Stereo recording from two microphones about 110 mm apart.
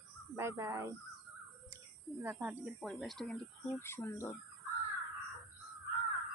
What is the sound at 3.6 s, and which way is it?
Speech, 20° left (ahead or behind).